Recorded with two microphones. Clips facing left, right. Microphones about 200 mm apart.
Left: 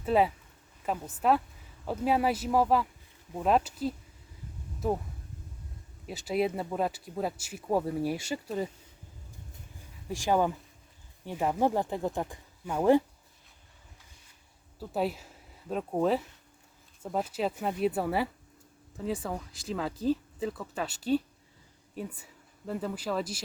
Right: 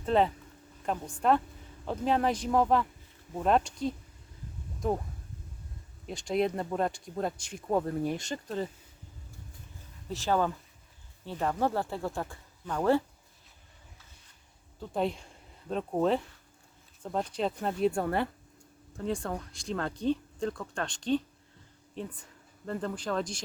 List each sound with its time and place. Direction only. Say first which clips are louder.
0.0 s speech: even; 5° left (ahead or behind)
6.1 s speech: even; 5° left (ahead or behind)
10.1 s speech: left 2 dB; 15° left (ahead or behind)
14.8 s speech: even; 5° left (ahead or behind)